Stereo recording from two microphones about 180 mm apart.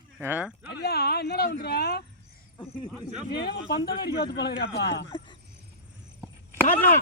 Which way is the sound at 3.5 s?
65° left (ahead or behind).